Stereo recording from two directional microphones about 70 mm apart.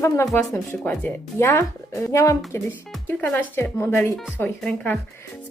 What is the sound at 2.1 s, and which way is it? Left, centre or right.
Speech, left.